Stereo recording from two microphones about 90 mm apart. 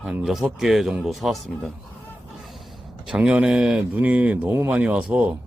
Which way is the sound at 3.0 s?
15° right (ahead or behind).